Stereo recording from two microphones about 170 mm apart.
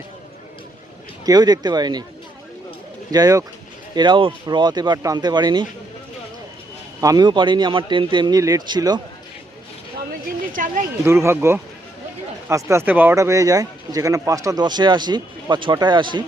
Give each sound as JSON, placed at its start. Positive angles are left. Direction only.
{"t": 1.2, "sound": "speech", "side_deg": -25}
{"t": 3.1, "sound": "speech", "side_deg": -20}
{"t": 7.0, "sound": "speech", "side_deg": -20}
{"t": 10.5, "sound": "speech", "side_deg": -50}
{"t": 11.0, "sound": "speech", "side_deg": -15}